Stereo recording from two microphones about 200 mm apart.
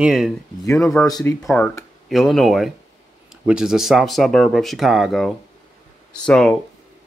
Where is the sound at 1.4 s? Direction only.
5° left (ahead or behind).